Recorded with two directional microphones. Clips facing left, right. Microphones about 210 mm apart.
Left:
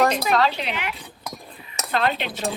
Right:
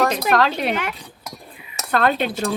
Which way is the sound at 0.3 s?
50° right (ahead or behind).